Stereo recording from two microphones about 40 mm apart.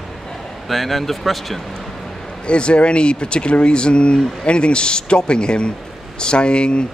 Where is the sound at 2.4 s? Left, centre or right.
Left.